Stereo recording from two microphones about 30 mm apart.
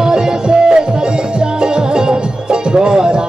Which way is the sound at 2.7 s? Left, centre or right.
Right.